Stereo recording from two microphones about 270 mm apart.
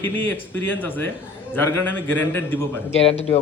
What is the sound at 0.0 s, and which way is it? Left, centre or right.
A man's voice, centre.